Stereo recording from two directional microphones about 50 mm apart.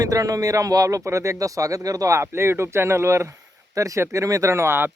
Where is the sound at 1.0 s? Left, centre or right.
Right.